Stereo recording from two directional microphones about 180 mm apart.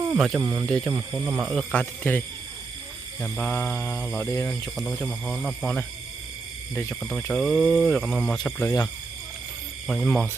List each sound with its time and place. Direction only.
0.2 s speech: centre (ahead or behind)
0.4 s speech: 15° right (ahead or behind)
1.7 s speech: 10° left (ahead or behind)
7.0 s speech: 5° left (ahead or behind)
8.4 s speech: 10° left (ahead or behind)
9.8 s speech: centre (ahead or behind)